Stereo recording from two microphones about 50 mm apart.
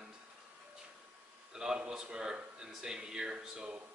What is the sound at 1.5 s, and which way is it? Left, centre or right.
A man's voice, centre.